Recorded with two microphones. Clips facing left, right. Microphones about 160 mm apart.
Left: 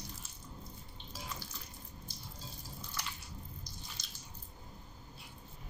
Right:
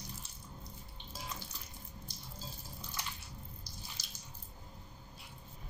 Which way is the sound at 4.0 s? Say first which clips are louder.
Even; 5° right (ahead or behind).